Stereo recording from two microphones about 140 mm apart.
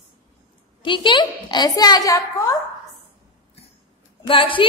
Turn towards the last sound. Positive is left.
turn(degrees=40)  # may be behind; listen again after turning